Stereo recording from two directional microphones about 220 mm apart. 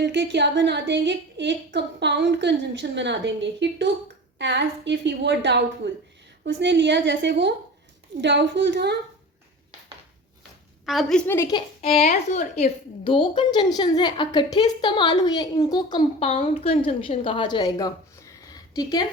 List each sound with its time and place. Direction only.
0.0 s a woman's voice: 50° right (ahead or behind)
10.8 s a woman's voice: centre (ahead or behind); by 11.9 s 20° left (ahead or behind)
11.9 s a woman's voice: 30° left (ahead or behind)